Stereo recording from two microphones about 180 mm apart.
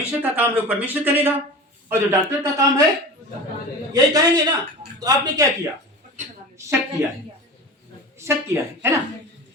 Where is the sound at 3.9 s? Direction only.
20° right (ahead or behind).